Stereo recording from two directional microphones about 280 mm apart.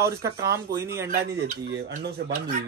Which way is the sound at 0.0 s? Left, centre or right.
Centre.